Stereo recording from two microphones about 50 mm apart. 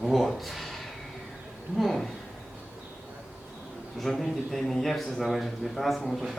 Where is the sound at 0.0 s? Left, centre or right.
Centre.